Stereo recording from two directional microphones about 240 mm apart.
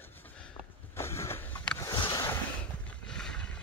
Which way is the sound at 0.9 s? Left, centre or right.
Centre.